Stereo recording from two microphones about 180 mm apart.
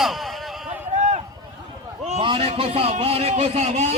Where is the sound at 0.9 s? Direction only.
40° right (ahead or behind).